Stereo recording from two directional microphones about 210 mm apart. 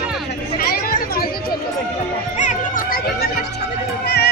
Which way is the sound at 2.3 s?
35° left (ahead or behind).